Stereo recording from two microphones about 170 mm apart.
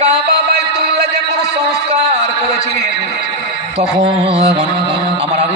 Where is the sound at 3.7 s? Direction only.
35° right (ahead or behind).